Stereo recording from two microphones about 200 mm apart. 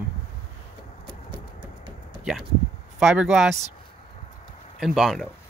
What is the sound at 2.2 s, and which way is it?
Speech, 5° right (ahead or behind).